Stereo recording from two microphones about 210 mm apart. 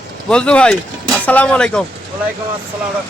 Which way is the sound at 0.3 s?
5° left (ahead or behind).